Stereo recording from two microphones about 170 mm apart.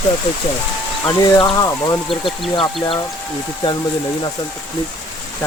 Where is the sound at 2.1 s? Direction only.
Centre (ahead or behind).